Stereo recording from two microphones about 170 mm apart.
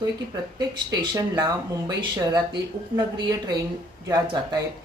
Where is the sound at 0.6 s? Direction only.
25° right (ahead or behind).